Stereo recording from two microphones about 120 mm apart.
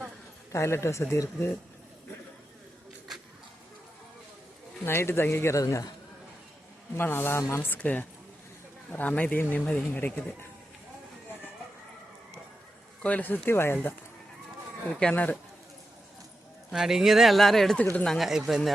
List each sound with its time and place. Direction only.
0.5 s speech: 20° left (ahead or behind)
4.9 s speech: 20° left (ahead or behind)
6.9 s speech: 15° left (ahead or behind)
13.0 s speech: 10° left (ahead or behind)
14.9 s speech: 10° left (ahead or behind)
16.7 s speech: 5° right (ahead or behind)